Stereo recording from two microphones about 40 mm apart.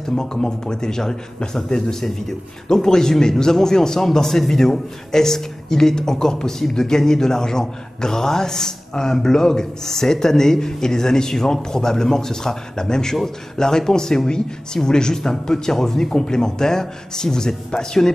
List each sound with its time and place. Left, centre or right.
0.1 s a man's voice: centre